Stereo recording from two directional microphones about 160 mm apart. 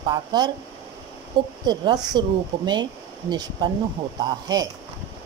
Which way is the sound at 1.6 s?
25° right (ahead or behind).